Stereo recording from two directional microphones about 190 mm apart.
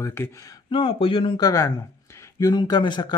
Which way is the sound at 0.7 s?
25° left (ahead or behind).